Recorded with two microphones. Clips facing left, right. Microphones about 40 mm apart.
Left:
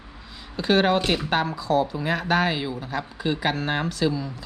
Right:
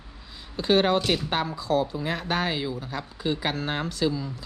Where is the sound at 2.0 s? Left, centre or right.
Centre.